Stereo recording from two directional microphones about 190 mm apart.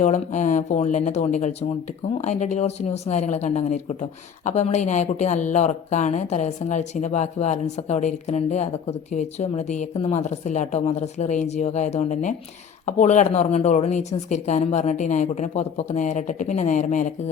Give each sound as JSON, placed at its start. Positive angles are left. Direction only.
{"t": 0.0, "sound": "speech", "side_deg": 40}